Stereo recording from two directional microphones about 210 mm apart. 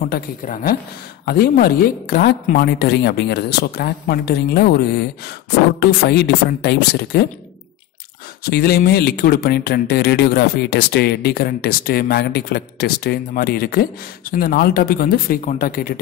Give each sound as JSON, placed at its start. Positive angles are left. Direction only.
{"t": 0.1, "sound": "speech", "side_deg": 45}
{"t": 8.5, "sound": "speech", "side_deg": 50}